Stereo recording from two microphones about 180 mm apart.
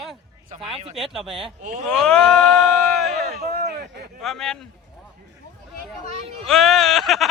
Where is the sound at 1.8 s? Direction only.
5° left (ahead or behind).